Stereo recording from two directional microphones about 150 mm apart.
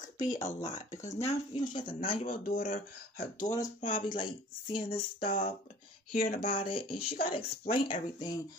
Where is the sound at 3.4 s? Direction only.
25° left (ahead or behind).